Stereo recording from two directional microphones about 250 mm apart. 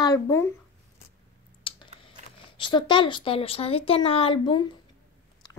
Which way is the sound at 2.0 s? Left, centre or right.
Left.